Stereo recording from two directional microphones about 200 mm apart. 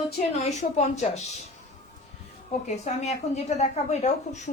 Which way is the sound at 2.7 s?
35° left (ahead or behind).